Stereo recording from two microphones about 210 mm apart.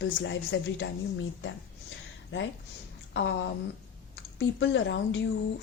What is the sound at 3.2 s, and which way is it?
Speech, 65° left (ahead or behind).